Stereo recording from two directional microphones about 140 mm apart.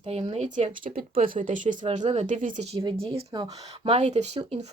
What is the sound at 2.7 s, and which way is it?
Speech, 35° right (ahead or behind).